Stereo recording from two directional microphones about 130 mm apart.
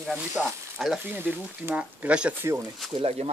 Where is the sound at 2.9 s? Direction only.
50° right (ahead or behind).